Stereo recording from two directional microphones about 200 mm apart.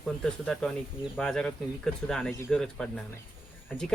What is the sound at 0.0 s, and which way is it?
Speech, 5° left (ahead or behind).